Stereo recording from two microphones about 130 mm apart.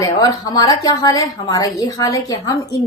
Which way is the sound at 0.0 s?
30° left (ahead or behind).